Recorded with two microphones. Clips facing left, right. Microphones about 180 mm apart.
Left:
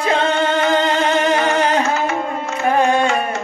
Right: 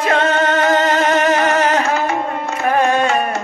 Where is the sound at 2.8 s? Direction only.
10° left (ahead or behind).